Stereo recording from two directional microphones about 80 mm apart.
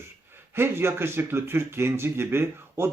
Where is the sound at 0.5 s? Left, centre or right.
Right.